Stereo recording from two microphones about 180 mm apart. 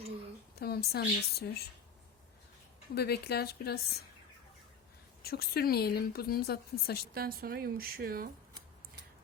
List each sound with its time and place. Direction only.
0.5 s a woman's voice: 60° left (ahead or behind)
2.9 s a woman's voice: 65° left (ahead or behind)
5.2 s a woman's voice: 60° left (ahead or behind)
7.1 s speech: 55° right (ahead or behind)